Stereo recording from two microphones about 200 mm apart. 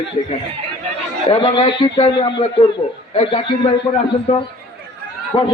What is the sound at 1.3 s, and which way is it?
A man's voice, 25° left (ahead or behind).